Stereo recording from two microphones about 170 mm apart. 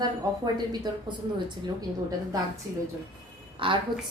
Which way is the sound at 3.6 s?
30° right (ahead or behind).